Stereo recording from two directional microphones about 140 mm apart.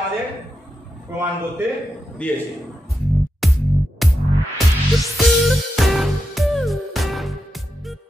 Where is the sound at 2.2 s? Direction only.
10° left (ahead or behind).